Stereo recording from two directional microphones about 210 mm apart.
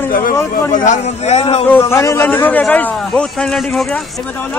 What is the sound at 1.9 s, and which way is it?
A man's voice, 15° left (ahead or behind).